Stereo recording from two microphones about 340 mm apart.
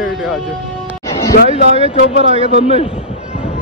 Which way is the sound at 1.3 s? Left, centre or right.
Left.